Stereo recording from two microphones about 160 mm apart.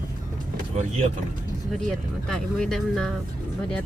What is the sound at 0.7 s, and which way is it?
Speech, 45° right (ahead or behind).